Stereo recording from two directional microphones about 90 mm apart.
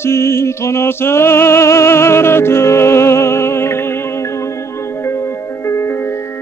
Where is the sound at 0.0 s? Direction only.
30° left (ahead or behind).